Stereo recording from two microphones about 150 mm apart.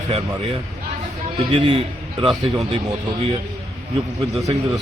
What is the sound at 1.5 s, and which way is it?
A man's voice, 35° right (ahead or behind).